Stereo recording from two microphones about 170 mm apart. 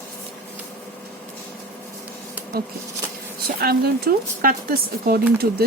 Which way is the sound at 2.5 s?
65° right (ahead or behind).